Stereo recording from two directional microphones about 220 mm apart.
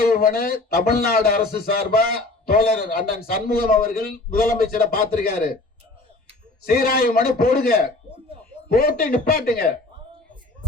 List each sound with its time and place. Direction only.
0.0 s speech: 45° left (ahead or behind)
6.7 s speech: 45° left (ahead or behind)